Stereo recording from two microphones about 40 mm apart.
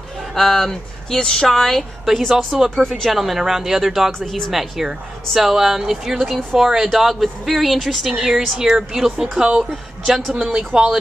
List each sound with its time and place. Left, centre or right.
0.3 s speech: centre
9.4 s speech: right
10.0 s speech: centre
10.4 s speech: centre